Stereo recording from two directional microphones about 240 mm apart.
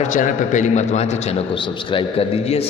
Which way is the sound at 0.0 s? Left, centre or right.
Left.